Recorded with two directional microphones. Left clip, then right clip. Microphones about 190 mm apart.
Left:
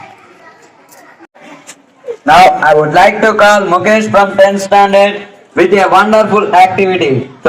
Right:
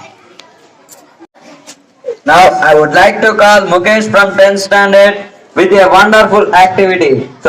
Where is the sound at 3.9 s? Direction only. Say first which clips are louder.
Right 1 dB; 10° right (ahead or behind).